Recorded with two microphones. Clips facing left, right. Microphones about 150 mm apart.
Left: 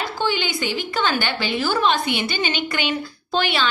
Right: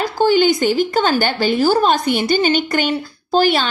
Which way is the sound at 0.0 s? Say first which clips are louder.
Right 10 dB; 40° right (ahead or behind).